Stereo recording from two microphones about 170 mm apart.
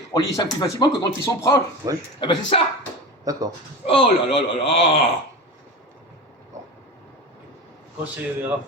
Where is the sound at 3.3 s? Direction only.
20° right (ahead or behind).